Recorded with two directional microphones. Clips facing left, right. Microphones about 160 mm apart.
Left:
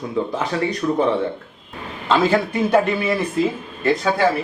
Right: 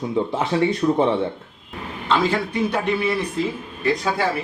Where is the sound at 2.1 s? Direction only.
5° left (ahead or behind).